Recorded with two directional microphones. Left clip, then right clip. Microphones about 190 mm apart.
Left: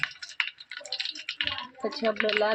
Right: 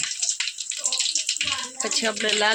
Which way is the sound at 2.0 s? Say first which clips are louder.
Right 3 dB; 20° right (ahead or behind).